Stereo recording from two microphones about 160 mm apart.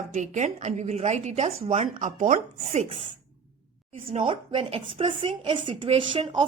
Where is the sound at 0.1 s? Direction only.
50° right (ahead or behind).